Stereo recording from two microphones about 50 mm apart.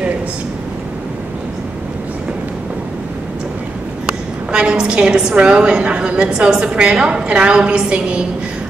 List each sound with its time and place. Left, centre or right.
4.5 s a woman's voice: centre